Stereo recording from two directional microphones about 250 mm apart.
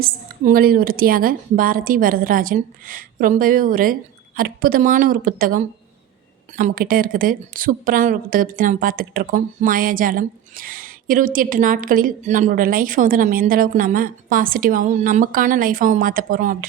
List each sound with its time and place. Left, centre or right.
0.0 s a woman's voice: right